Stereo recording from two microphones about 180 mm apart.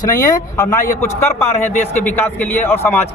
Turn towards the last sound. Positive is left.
turn(degrees=10)  # may be behind; listen again after turning